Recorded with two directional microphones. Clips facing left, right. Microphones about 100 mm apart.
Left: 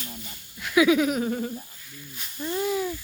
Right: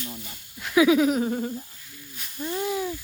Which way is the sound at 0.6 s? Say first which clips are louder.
Right 1 dB; 25° right (ahead or behind).